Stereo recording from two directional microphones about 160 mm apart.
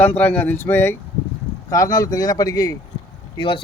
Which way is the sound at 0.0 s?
10° left (ahead or behind).